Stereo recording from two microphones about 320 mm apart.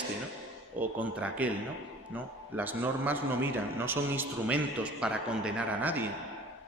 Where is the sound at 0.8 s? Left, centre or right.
Centre.